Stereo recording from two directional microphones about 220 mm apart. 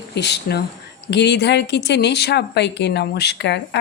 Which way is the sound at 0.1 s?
50° left (ahead or behind).